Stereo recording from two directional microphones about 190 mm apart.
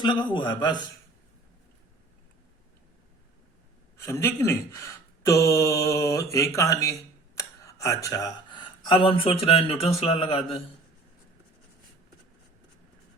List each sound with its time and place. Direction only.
0.0 s speech: 25° left (ahead or behind)
4.0 s speech: 15° left (ahead or behind); by 10.4 s 30° left (ahead or behind)